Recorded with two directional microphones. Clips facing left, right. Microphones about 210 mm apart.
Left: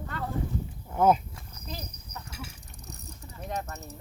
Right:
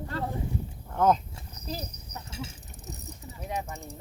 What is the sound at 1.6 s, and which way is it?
Horse, 55° left (ahead or behind).